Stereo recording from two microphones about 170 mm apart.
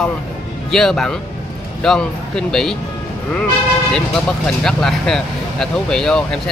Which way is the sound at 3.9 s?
5° left (ahead or behind).